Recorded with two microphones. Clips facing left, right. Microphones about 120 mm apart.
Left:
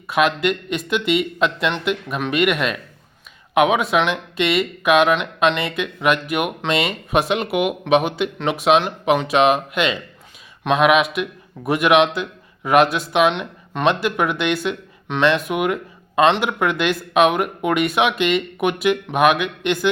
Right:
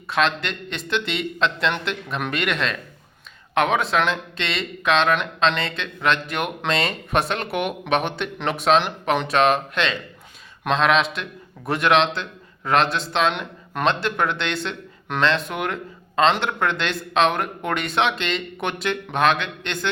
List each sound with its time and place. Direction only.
0.1 s speech: 10° left (ahead or behind)
15.1 s speech: centre (ahead or behind)